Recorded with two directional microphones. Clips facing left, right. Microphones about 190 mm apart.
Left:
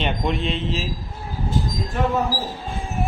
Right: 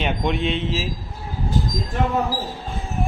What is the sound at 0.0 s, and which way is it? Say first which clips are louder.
Speech: right 1 dB; centre (ahead or behind).